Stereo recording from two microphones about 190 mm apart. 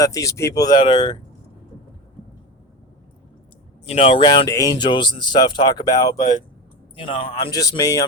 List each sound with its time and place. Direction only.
0.0 s speech: 15° left (ahead or behind)
3.8 s speech: 30° left (ahead or behind)